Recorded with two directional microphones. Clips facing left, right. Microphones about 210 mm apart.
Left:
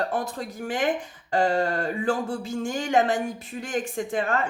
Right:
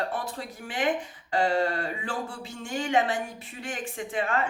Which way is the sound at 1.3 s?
45° left (ahead or behind).